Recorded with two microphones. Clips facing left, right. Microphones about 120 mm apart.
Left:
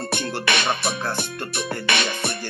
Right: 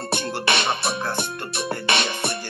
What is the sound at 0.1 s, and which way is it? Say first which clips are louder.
Music: right 2 dB; 30° right (ahead or behind).